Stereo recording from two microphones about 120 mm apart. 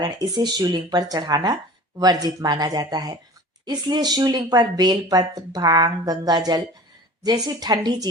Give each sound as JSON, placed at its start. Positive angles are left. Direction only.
{"t": 0.0, "sound": "speech", "side_deg": -35}